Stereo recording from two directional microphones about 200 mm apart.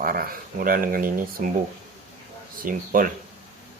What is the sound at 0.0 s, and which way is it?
Speech, 45° right (ahead or behind).